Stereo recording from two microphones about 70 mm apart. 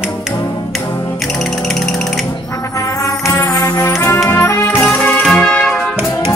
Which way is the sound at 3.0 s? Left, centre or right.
Left.